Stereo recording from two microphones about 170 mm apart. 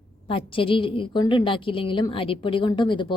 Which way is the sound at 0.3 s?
30° left (ahead or behind).